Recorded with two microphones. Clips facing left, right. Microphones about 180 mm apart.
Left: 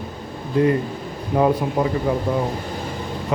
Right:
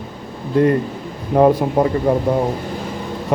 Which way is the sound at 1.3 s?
50° right (ahead or behind).